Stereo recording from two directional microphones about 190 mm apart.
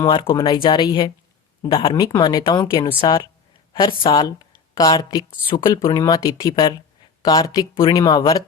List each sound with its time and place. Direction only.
0.0 s a woman's voice: 25° left (ahead or behind)